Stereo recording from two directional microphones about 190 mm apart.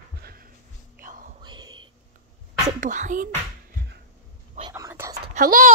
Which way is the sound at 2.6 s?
40° right (ahead or behind).